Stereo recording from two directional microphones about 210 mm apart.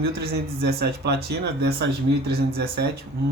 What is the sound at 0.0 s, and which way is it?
Speech, 50° right (ahead or behind).